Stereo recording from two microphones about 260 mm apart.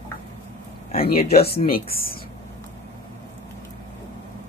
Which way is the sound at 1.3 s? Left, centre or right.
Left.